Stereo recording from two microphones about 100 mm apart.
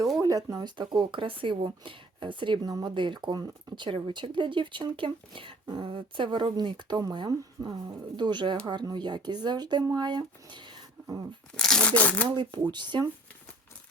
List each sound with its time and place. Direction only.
0.2 s speech: 35° right (ahead or behind)
0.8 s speech: 50° right (ahead or behind)
11.5 s speech: 5° left (ahead or behind)
12.3 s speech: 50° right (ahead or behind)